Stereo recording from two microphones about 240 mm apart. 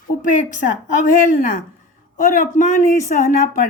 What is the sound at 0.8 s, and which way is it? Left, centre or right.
Speech, left.